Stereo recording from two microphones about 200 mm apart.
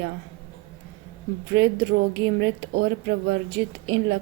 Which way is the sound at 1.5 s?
65° right (ahead or behind).